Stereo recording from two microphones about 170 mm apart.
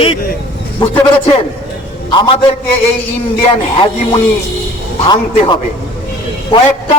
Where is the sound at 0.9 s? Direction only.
30° left (ahead or behind).